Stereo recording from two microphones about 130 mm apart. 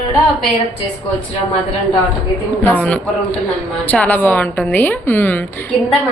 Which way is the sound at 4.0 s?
10° left (ahead or behind).